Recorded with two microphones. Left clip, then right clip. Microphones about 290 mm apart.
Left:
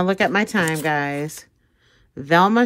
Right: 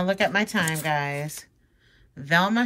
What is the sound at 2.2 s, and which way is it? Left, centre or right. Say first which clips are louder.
Speech: left 6 dB; centre.